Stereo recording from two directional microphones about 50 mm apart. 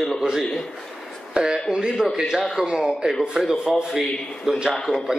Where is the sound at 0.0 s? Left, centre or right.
Centre.